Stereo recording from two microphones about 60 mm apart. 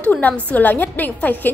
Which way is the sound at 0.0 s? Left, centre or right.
Left.